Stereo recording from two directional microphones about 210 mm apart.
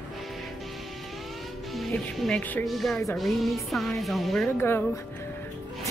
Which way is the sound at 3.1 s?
Centre (ahead or behind).